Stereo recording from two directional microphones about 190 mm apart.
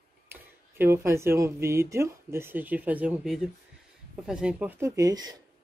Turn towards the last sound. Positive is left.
turn(degrees=-15)  # may be behind; listen again after turning